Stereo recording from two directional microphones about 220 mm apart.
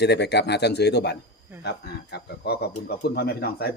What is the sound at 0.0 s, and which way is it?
Speech, 50° left (ahead or behind).